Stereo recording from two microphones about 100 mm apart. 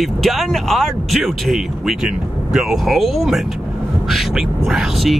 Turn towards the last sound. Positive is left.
turn(degrees=0)  # may be behind; listen again after turning